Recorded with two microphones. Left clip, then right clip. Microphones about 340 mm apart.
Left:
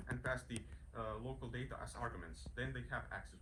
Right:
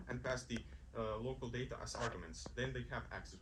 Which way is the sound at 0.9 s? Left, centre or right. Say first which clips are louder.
Right 3 dB; centre.